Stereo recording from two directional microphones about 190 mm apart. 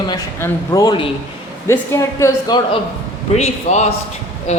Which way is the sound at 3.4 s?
35° left (ahead or behind).